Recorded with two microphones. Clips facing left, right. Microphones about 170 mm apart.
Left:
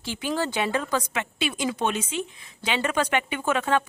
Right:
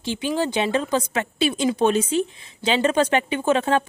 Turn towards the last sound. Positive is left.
turn(degrees=-30)  # may be behind; listen again after turning